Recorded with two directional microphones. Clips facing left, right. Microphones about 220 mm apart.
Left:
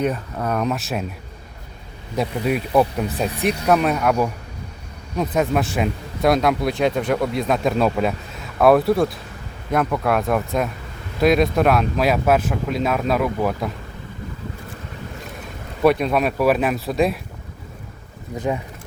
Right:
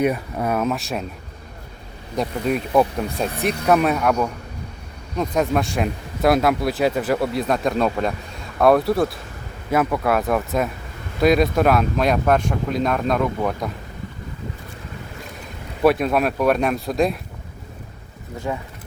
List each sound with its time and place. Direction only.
0.0 s speech: 10° right (ahead or behind)
2.1 s speech: 5° left (ahead or behind)
15.8 s speech: centre (ahead or behind)
18.3 s speech: 20° left (ahead or behind)